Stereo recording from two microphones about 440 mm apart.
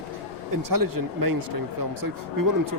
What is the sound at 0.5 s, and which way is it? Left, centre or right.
Speech, right.